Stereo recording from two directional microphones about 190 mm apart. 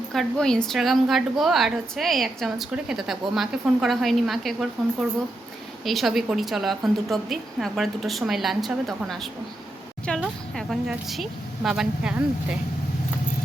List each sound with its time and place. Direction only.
0.1 s a woman's voice: centre (ahead or behind)
5.8 s a woman's voice: centre (ahead or behind)